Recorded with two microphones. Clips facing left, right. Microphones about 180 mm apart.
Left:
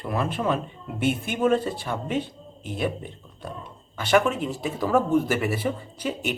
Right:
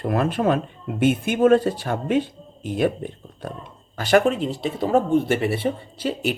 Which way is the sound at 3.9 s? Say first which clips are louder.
Right 3 dB; 40° right (ahead or behind).